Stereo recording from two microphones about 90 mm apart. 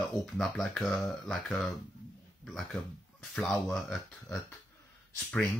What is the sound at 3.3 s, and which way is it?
Speech, 10° left (ahead or behind).